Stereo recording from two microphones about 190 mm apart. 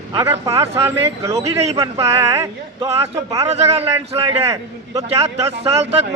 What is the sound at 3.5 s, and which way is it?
Speech, 35° right (ahead or behind).